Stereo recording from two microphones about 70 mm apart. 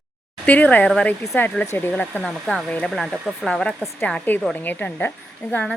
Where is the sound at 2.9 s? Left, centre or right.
Centre.